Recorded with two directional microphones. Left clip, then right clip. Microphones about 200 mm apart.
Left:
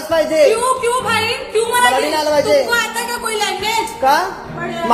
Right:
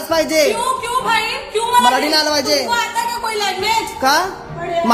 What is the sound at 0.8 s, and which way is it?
Speech, 15° right (ahead or behind).